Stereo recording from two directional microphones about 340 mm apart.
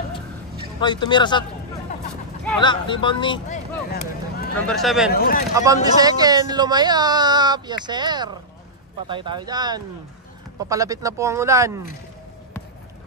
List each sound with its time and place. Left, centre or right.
0.7 s speech: centre
2.6 s speech: centre
4.6 s a man's voice: centre
5.1 s speech: left
5.5 s speech: centre